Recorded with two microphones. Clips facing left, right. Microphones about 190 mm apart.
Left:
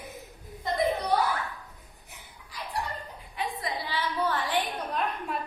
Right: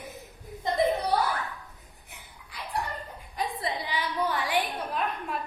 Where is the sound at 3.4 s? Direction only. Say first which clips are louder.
Right 1 dB; 40° right (ahead or behind).